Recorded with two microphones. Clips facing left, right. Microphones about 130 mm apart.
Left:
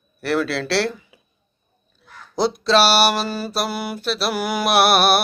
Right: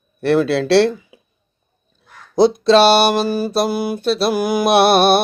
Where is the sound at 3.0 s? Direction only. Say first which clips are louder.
Right 4 dB; 20° right (ahead or behind).